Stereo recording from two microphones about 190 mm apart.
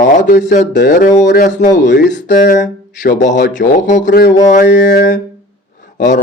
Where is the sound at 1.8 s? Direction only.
65° left (ahead or behind).